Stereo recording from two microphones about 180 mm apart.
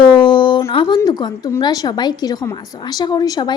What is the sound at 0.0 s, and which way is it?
Speech, 25° left (ahead or behind).